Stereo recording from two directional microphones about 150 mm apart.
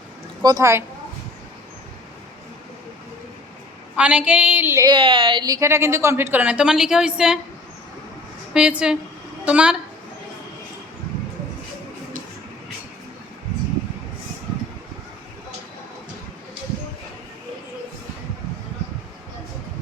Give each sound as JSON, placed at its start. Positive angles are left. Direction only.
{"t": 0.4, "sound": "a woman's voice", "side_deg": -20}
{"t": 3.9, "sound": "a woman's voice", "side_deg": -10}
{"t": 4.9, "sound": "a woman's voice", "side_deg": -35}
{"t": 8.5, "sound": "a woman's voice", "side_deg": -5}